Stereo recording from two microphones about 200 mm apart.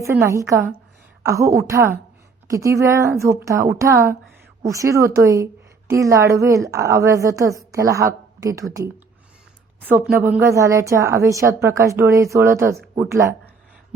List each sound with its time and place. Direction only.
0.0 s a woman's voice: 15° right (ahead or behind)
9.8 s a woman's voice: 10° right (ahead or behind)